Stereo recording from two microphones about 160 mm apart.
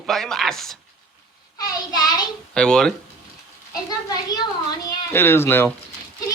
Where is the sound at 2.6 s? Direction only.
5° left (ahead or behind).